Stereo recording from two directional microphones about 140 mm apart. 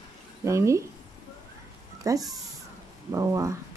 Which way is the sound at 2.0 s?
25° right (ahead or behind).